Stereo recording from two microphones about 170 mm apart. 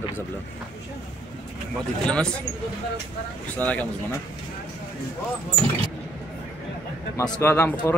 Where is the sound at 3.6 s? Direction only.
10° left (ahead or behind).